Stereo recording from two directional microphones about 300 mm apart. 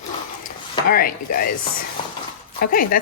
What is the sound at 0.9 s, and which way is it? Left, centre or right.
Speech, left.